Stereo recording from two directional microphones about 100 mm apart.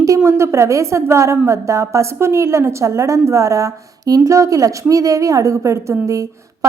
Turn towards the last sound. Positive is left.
turn(degrees=-30)  # may be behind; listen again after turning